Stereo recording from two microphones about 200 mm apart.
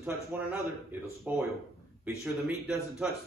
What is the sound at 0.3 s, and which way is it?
A man's voice, 10° right (ahead or behind).